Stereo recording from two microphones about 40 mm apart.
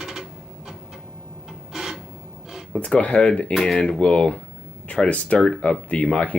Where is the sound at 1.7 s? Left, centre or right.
Centre.